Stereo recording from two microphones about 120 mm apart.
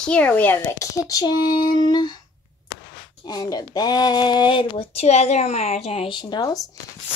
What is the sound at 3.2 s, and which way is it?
Speech, 35° left (ahead or behind).